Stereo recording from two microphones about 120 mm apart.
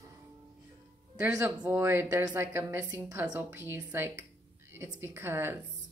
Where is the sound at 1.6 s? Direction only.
20° right (ahead or behind).